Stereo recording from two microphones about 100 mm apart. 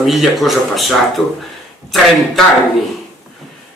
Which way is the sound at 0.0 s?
Centre (ahead or behind).